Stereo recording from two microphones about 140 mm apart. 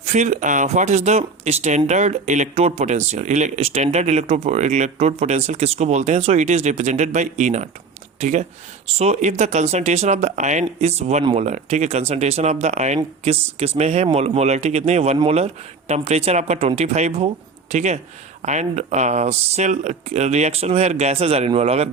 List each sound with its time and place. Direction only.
0.0 s speech: 55° right (ahead or behind)